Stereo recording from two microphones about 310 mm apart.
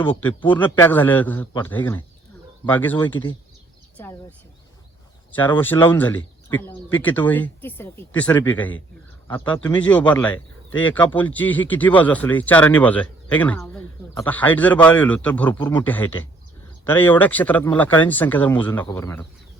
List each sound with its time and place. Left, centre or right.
0.0 s a man's voice: centre
5.3 s speech: centre